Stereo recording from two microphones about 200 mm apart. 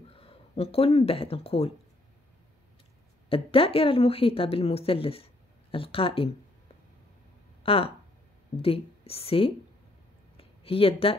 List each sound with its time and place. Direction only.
0.1 s speech: 30° left (ahead or behind)
3.3 s speech: 30° left (ahead or behind)
7.6 s speech: 30° left (ahead or behind)
10.3 s a sound: 30° left (ahead or behind)